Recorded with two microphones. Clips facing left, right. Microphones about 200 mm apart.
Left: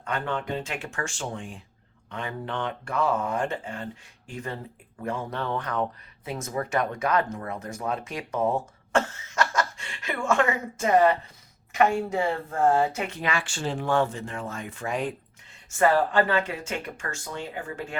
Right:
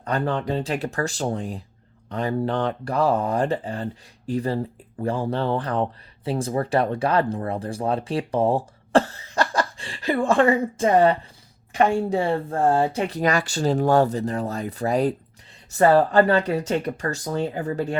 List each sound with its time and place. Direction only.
0.0 s speech: 35° right (ahead or behind)